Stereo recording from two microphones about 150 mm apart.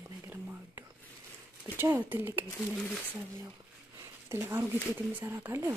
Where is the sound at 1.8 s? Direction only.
15° right (ahead or behind).